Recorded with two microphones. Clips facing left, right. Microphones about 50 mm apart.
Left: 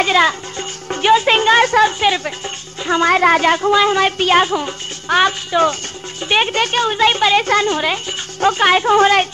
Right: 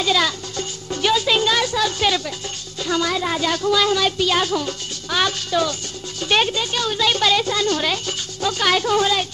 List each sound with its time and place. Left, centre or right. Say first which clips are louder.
0.0 s speech: left 6 dB; left
1.9 s speech: left 4 dB; left
3.1 s speech: left 10 dB; left
3.7 s speech: left 5 dB; left
5.1 s a woman's voice: left 7 dB; left
5.5 s speech: left 6 dB; left
6.5 s a woman's voice: left 6 dB; left
6.8 s speech: left 5 dB; left